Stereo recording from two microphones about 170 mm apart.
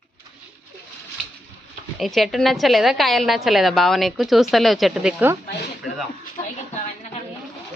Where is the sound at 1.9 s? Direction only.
Centre (ahead or behind).